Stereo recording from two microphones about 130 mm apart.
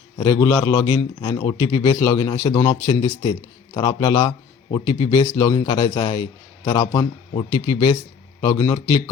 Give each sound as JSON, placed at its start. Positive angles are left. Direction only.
{"t": 0.2, "sound": "a man's voice", "side_deg": 25}